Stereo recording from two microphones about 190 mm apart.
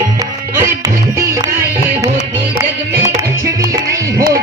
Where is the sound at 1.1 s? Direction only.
15° right (ahead or behind).